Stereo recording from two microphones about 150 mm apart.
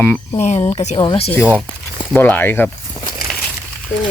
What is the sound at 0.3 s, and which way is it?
Speech, 50° left (ahead or behind).